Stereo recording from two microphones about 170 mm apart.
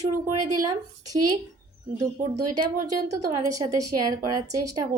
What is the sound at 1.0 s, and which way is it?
Speech, 20° right (ahead or behind).